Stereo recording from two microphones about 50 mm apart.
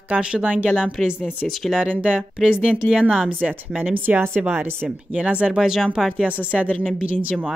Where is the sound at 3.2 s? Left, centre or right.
Right.